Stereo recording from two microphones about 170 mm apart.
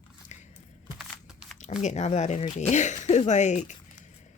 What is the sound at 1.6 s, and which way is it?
Speech, 40° left (ahead or behind).